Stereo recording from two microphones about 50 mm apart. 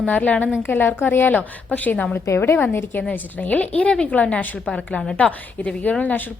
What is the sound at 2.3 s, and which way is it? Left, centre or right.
Speech, left.